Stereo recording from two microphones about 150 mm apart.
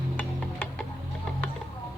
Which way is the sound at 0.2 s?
10° left (ahead or behind).